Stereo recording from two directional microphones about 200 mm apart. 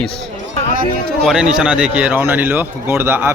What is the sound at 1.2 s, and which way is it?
Speech, centre (ahead or behind).